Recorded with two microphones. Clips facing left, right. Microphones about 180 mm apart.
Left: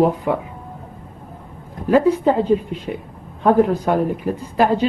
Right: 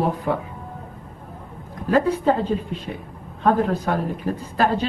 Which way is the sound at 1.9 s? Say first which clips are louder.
Left 4 dB; 15° left (ahead or behind).